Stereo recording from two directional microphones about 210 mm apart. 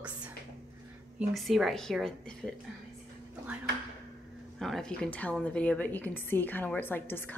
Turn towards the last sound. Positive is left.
turn(degrees=10)  # may be behind; listen again after turning